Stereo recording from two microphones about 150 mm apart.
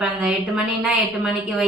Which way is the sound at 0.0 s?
5° right (ahead or behind).